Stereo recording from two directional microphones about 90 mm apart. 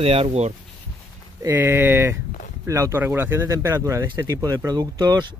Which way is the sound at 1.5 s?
20° right (ahead or behind).